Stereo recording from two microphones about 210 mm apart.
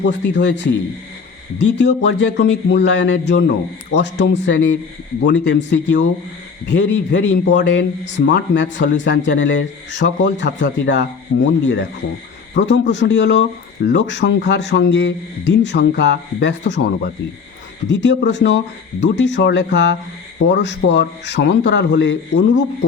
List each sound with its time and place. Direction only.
0.0 s speech: 55° left (ahead or behind)
18.0 s speech: 55° left (ahead or behind)